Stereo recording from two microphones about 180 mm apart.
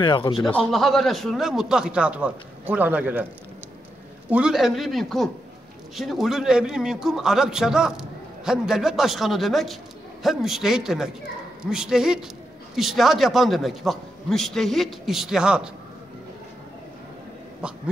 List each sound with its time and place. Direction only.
0.0 s speech: 25° left (ahead or behind)
0.6 s a man's voice: centre (ahead or behind)
4.3 s a man's voice: 5° right (ahead or behind)